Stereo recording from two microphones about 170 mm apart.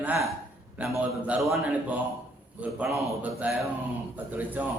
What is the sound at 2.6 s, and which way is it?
Speech, 5° right (ahead or behind).